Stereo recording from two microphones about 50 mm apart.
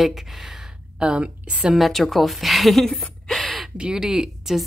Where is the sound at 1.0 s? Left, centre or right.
Right.